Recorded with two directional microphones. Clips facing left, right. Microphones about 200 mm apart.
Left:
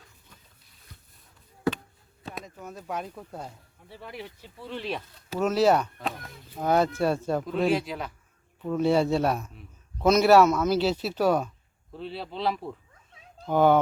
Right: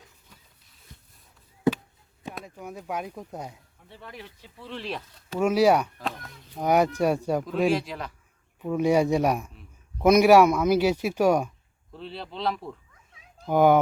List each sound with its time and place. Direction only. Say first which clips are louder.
0.9 s a sound: right 1 dB; 20° right (ahead or behind)
2.3 s speech: right 1 dB; 10° right (ahead or behind)
3.8 s speech: left 3 dB; 5° left (ahead or behind)
5.4 s speech: right 2 dB; 10° right (ahead or behind)
7.4 s speech: even; centre (ahead or behind)
8.6 s speech: right 1 dB; 10° right (ahead or behind)
11.9 s speech: left 2 dB; centre (ahead or behind)
13.4 s speech: right 1 dB; 10° right (ahead or behind)